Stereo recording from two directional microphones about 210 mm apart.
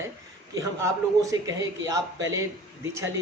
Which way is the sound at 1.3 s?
15° right (ahead or behind).